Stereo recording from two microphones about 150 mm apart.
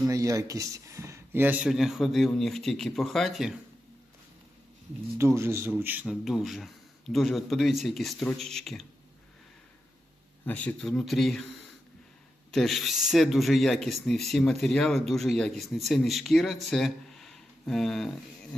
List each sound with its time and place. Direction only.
0.1 s speech: 20° right (ahead or behind); by 3.5 s centre (ahead or behind)
5.1 s speech: 20° right (ahead or behind); by 8.9 s centre (ahead or behind)
10.4 s speech: 10° left (ahead or behind)
12.5 s speech: centre (ahead or behind)